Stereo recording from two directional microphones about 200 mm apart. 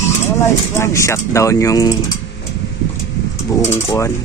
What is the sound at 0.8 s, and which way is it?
Speech, 15° left (ahead or behind).